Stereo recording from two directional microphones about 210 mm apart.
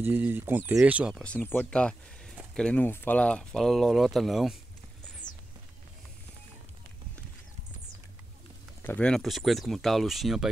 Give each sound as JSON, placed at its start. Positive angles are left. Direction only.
{"t": 0.0, "sound": "speech", "side_deg": -10}
{"t": 5.2, "sound": "music", "side_deg": 20}
{"t": 8.8, "sound": "speech", "side_deg": 5}